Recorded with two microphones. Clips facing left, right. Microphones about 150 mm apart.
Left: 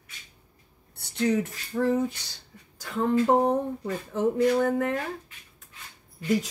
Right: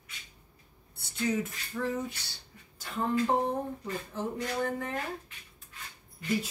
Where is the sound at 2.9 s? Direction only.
60° left (ahead or behind).